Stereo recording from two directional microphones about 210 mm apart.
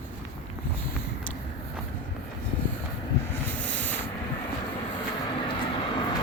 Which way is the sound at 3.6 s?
10° left (ahead or behind).